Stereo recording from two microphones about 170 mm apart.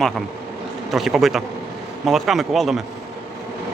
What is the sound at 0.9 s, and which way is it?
Speech, centre (ahead or behind).